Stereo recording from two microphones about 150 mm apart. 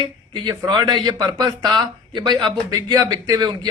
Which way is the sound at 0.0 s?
30° right (ahead or behind).